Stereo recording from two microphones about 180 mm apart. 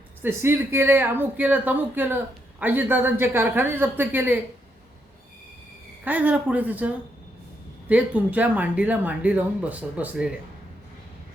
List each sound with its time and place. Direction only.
0.2 s a woman's voice: 15° right (ahead or behind)
6.1 s a woman's voice: 10° right (ahead or behind)